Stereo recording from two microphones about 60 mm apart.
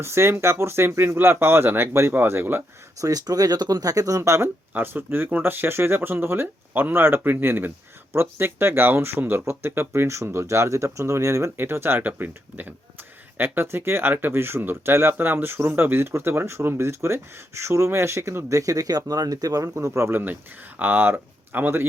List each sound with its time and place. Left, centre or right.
0.0 s speech: right
3.0 s speech: right
4.2 s speech: right
11.5 s speech: right
12.0 s speech: right
18.4 s speech: right
20.7 s speech: right